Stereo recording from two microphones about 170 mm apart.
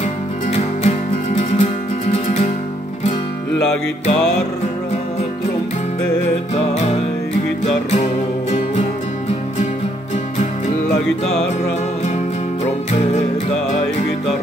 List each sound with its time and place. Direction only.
0.5 s music: 40° left (ahead or behind)
6.5 s music: 40° left (ahead or behind)
11.1 s music: 5° left (ahead or behind)